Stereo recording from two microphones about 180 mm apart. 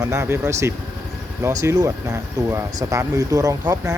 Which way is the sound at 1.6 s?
15° right (ahead or behind).